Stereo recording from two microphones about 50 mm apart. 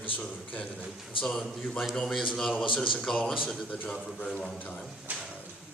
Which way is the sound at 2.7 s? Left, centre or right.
Left.